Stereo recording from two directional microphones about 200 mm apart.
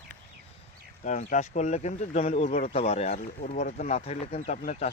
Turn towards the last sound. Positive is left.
turn(degrees=35)  # may be behind; listen again after turning